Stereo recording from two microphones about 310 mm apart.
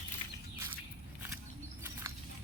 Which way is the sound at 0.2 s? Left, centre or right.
Centre.